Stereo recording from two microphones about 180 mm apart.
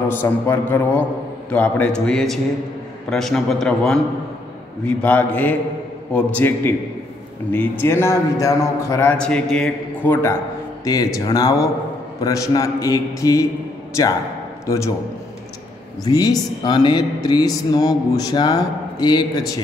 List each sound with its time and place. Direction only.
0.1 s a man's voice: 10° left (ahead or behind)
16.0 s a man's voice: 20° left (ahead or behind)